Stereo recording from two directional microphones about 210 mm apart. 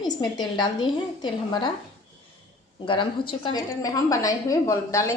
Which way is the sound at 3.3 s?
20° left (ahead or behind).